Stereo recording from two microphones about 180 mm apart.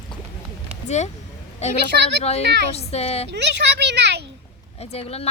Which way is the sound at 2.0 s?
75° right (ahead or behind).